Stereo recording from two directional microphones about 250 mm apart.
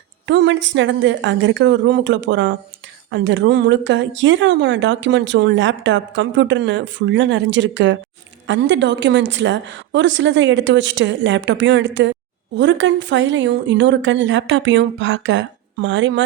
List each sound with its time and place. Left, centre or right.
0.3 s a woman's voice: right